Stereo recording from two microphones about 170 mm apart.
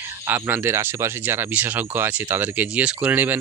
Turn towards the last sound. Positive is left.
turn(degrees=-10)  # may be behind; listen again after turning